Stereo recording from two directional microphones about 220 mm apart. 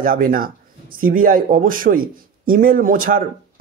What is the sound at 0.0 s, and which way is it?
Speech, 40° right (ahead or behind).